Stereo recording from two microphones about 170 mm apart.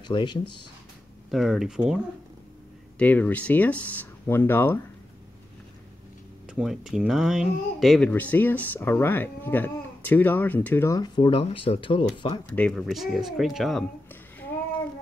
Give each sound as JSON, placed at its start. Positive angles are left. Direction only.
{"t": 0.0, "sound": "speech", "side_deg": 25}
{"t": 1.3, "sound": "speech", "side_deg": 0}
{"t": 3.0, "sound": "speech", "side_deg": 10}
{"t": 6.4, "sound": "speech", "side_deg": -5}
{"t": 8.1, "sound": "speech", "side_deg": 10}
{"t": 12.4, "sound": "speech", "side_deg": 10}